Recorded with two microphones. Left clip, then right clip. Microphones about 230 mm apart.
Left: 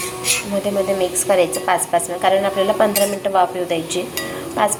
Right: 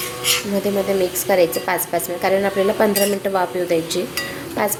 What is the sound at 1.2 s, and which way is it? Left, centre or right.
Speech, right.